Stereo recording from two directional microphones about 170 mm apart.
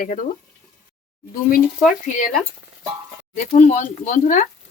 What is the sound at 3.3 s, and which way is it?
Speech, 45° left (ahead or behind).